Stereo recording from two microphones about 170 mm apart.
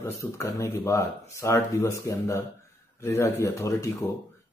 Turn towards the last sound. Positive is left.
turn(degrees=15)  # may be behind; listen again after turning